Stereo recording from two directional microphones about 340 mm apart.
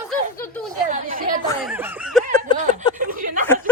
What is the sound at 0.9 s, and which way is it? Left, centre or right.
Speech, right.